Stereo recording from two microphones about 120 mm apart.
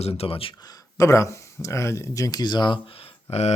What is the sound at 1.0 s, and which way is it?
Speech, 25° left (ahead or behind).